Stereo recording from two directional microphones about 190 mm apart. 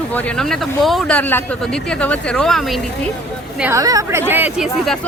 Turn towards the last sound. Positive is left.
turn(degrees=0)  # may be behind; listen again after turning